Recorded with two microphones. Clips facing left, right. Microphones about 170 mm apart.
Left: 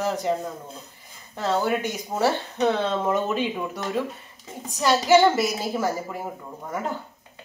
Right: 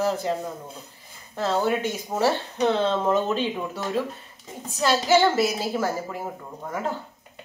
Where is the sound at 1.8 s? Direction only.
15° left (ahead or behind).